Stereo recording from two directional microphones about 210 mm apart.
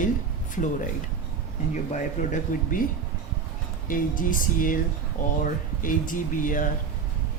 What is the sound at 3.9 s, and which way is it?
Speech, 40° left (ahead or behind).